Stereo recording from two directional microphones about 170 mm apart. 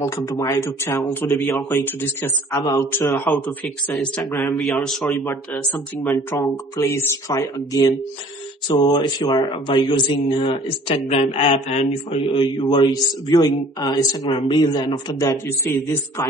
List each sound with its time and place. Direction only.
0.0 s speech: 20° left (ahead or behind)
3.9 s a man's voice: 5° left (ahead or behind)
4.3 s a man's voice: 20° left (ahead or behind)
4.6 s a man's voice: centre (ahead or behind)
5.1 s speech: 15° left (ahead or behind)
6.0 s speech: 15° left (ahead or behind); by 12.4 s 40° left (ahead or behind)
12.5 s a man's voice: 30° left (ahead or behind)